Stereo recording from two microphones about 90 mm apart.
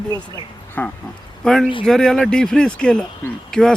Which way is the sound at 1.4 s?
5° left (ahead or behind).